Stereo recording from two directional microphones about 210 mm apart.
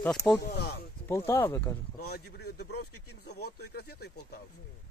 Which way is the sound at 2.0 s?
50° left (ahead or behind).